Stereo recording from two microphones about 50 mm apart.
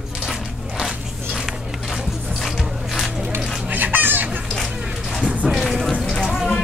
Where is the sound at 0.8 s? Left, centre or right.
Centre.